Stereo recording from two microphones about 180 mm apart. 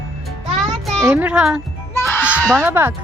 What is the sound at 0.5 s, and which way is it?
Music, centre (ahead or behind).